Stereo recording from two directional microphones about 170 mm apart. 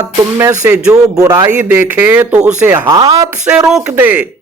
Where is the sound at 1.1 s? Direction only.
20° right (ahead or behind).